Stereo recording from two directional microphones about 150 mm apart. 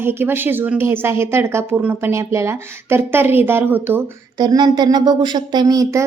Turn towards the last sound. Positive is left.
turn(degrees=-25)  # may be behind; listen again after turning